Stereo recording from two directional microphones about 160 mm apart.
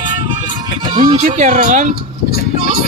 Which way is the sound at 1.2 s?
55° right (ahead or behind).